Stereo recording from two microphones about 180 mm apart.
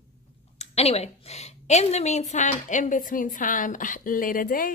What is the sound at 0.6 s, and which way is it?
Speech, 35° left (ahead or behind).